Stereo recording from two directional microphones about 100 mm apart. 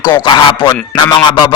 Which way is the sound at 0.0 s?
50° left (ahead or behind).